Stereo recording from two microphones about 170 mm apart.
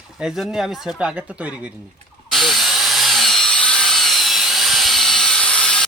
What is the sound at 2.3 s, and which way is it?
Drill, centre (ahead or behind).